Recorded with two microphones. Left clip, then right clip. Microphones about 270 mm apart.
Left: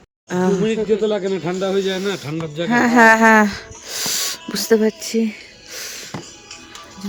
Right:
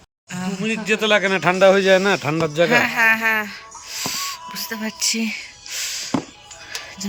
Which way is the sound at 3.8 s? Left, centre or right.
Left.